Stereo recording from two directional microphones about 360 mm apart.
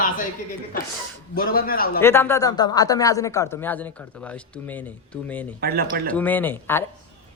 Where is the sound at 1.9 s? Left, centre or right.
Centre.